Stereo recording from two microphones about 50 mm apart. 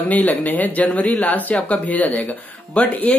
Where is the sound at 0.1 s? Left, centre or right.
Left.